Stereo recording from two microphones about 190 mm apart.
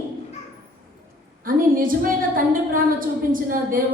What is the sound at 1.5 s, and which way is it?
A woman's voice, 45° right (ahead or behind).